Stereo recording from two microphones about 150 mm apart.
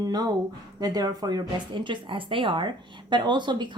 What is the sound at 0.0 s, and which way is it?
A woman's voice, 25° right (ahead or behind).